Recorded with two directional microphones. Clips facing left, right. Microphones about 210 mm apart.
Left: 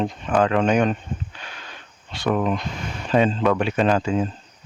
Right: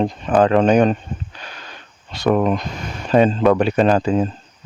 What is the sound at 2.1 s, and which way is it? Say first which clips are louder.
Speech: right 5 dB; 40° right (ahead or behind).